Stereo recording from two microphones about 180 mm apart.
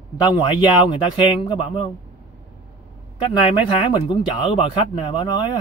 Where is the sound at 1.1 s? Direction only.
30° left (ahead or behind).